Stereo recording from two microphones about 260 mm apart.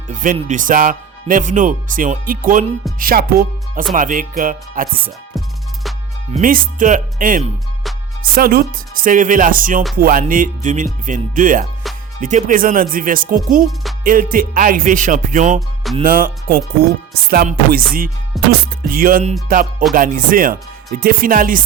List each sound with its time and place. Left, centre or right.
0.1 s speech: right
6.3 s speech: right